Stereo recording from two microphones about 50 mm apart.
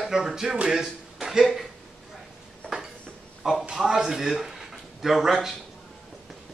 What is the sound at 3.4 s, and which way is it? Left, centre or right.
Speech, centre.